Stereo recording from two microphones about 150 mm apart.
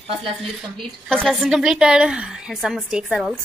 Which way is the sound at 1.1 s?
5° left (ahead or behind).